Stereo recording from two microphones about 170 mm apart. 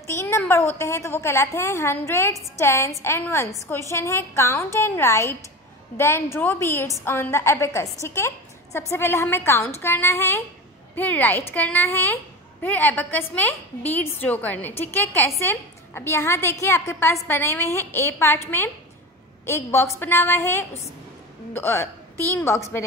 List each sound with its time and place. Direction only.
0.0 s a woman's voice: 15° left (ahead or behind)
19.4 s a woman's voice: 15° left (ahead or behind)